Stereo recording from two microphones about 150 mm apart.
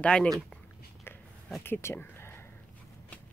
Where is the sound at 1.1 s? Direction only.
15° left (ahead or behind).